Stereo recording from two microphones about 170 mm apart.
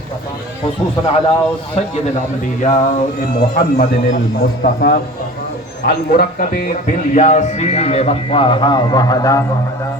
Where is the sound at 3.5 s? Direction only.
55° left (ahead or behind); by 9.4 s 20° left (ahead or behind).